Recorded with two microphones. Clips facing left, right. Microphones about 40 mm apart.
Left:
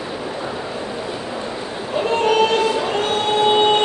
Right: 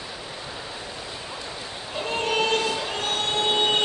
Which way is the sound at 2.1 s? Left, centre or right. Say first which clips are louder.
Left 8 dB; centre.